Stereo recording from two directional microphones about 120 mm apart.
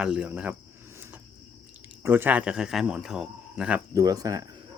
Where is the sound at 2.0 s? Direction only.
15° right (ahead or behind).